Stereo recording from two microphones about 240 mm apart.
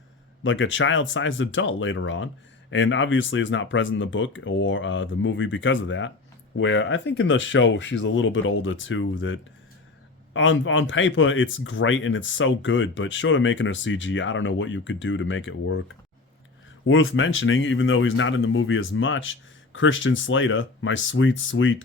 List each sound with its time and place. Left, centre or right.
0.4 s speech: left
16.8 s speech: left